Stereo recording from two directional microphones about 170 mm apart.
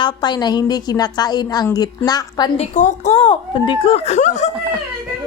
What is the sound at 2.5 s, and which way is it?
Speech, 45° left (ahead or behind).